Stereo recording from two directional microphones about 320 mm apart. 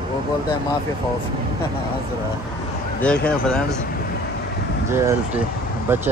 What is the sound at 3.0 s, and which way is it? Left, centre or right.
Speech, centre.